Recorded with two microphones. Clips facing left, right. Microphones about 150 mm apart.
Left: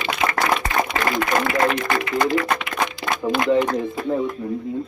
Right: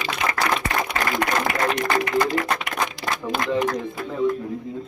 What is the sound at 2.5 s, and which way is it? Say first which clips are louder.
Shuffling cards: left 2 dB; 35° right (ahead or behind).